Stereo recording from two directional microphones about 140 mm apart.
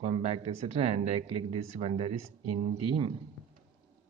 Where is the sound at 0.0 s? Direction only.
45° right (ahead or behind).